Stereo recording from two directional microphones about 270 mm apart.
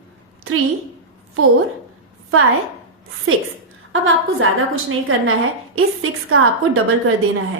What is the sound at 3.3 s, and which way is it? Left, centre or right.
A woman's voice, right.